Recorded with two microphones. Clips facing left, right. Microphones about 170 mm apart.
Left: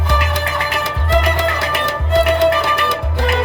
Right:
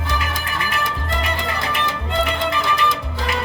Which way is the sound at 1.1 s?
80° left.